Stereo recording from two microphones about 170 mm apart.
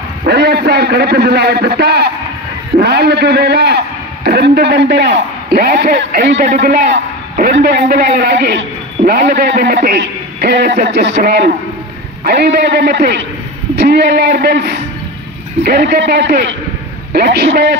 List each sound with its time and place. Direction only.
0.3 s a man's voice: 75° right (ahead or behind)
5.9 s a man's voice: 70° right (ahead or behind)
6.3 s a man's voice: 50° right (ahead or behind); by 10.8 s 80° right
10.9 s speech: 90° right
11.2 s a man's voice: 75° right (ahead or behind)
12.5 s a man's voice: 70° right (ahead or behind)